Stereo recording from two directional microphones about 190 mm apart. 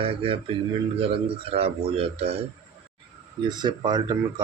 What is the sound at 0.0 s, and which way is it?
A man's voice, 30° right (ahead or behind).